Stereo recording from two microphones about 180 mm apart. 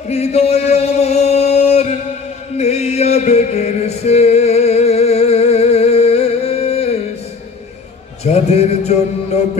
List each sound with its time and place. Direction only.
0.1 s chant: 35° left (ahead or behind)
2.5 s music: 35° left (ahead or behind)
8.2 s music: 35° left (ahead or behind)